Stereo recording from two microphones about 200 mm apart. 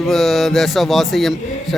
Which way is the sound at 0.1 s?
Centre (ahead or behind).